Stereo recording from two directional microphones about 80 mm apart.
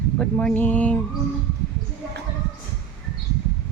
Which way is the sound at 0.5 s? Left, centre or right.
Centre.